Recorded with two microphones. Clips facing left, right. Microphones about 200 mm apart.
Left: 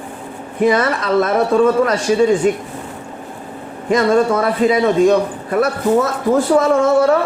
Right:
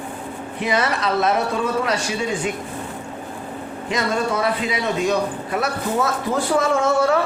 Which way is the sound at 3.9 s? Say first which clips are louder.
Left 9 dB; 50° left (ahead or behind).